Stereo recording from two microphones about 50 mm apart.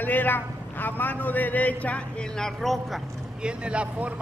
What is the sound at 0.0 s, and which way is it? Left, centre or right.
A man's voice, left.